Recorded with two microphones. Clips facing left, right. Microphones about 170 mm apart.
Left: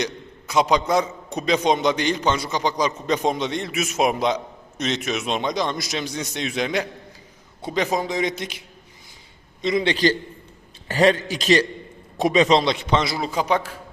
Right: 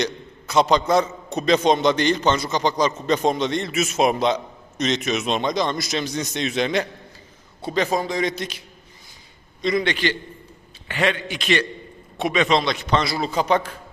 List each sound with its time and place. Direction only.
0.0 s a man's voice: 10° left (ahead or behind)
9.6 s a man's voice: 25° left (ahead or behind); by 13.7 s 5° left (ahead or behind)